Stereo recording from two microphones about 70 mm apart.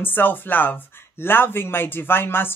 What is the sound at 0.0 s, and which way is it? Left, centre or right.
Speech, left.